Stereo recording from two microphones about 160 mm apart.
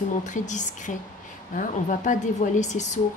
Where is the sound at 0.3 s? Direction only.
50° left (ahead or behind).